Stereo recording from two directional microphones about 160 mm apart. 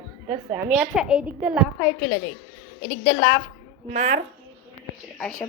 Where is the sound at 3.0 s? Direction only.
55° left (ahead or behind).